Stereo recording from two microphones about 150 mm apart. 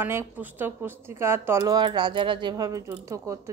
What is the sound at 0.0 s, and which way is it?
Speech, 15° right (ahead or behind).